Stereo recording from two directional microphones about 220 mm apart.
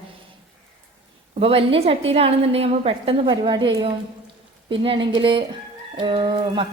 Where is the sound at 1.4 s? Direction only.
25° right (ahead or behind).